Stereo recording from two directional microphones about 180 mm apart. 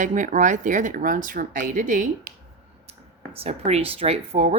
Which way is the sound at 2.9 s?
35° right (ahead or behind).